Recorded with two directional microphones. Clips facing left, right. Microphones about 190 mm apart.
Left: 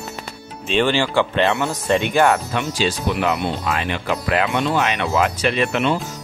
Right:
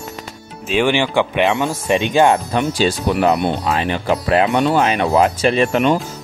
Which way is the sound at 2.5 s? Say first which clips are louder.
Right 4 dB; 40° right (ahead or behind).